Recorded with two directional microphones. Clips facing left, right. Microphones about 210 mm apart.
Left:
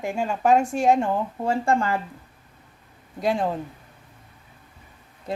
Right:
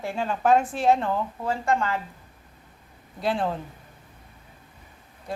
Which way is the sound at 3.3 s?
10° left (ahead or behind).